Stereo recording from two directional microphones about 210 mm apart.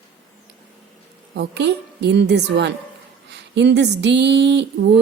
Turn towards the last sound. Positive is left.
turn(degrees=-55)  # may be behind; listen again after turning